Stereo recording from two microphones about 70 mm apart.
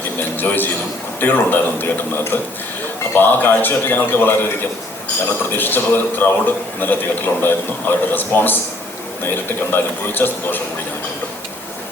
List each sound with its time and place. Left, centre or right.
0.2 s a man's voice: left
9.7 s a man's voice: left